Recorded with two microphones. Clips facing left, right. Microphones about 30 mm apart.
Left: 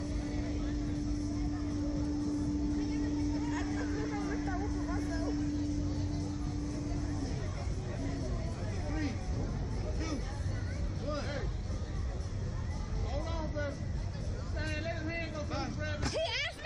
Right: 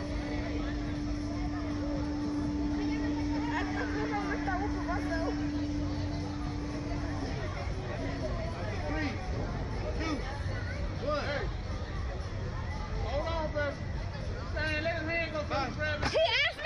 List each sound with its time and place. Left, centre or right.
0.0 s vehicle: right
8.0 s a sound: right
11.1 s vehicle: right
13.1 s vehicle: right